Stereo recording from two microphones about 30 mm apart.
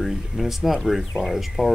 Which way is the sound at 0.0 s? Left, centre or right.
Centre.